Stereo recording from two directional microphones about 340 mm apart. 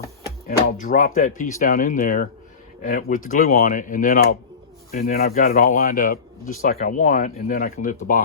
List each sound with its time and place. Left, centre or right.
0.4 s speech: left
3.2 s speech: left